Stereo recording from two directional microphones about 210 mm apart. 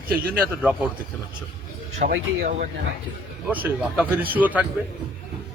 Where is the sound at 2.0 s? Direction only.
45° right (ahead or behind).